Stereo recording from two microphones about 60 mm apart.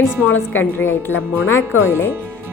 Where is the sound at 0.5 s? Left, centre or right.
Left.